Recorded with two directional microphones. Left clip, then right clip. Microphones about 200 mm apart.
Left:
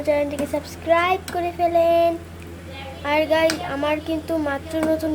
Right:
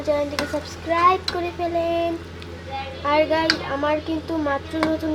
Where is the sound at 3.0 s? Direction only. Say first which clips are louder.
Left 1 dB; 20° left (ahead or behind).